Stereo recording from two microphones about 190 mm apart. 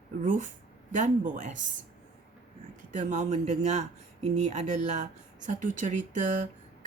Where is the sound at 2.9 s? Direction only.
40° right (ahead or behind).